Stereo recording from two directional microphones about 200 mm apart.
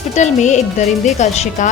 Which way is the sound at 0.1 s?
35° left (ahead or behind).